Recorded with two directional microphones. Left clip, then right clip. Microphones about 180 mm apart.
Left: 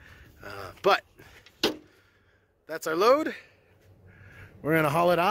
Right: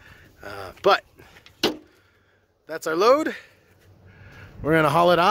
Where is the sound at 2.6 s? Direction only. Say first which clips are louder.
Right 4 dB; centre (ahead or behind).